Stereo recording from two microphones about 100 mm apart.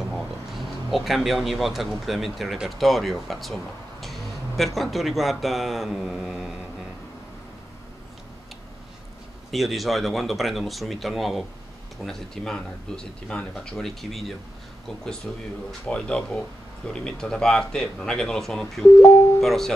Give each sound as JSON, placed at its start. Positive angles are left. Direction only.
{"t": 0.1, "sound": "speech", "side_deg": 0}
{"t": 9.5, "sound": "speech", "side_deg": 0}
{"t": 15.9, "sound": "speech", "side_deg": 10}